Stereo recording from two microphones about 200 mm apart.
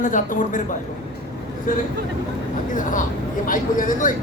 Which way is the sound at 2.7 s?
40° left (ahead or behind).